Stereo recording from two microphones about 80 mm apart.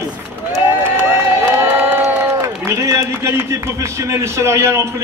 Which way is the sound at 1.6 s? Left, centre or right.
Centre.